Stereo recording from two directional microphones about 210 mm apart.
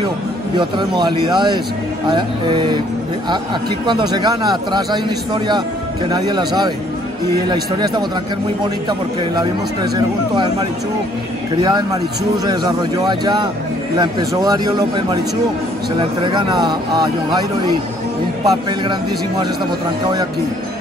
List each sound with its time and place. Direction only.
0.6 s a man's voice: 20° right (ahead or behind)
3.8 s a man's voice: 20° right (ahead or behind)
11.6 s a man's voice: 20° right (ahead or behind)
16.3 s a man's voice: 20° right (ahead or behind)
18.4 s a man's voice: 20° right (ahead or behind)